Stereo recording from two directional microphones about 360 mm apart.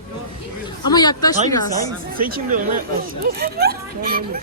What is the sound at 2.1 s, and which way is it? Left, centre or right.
Speech, right.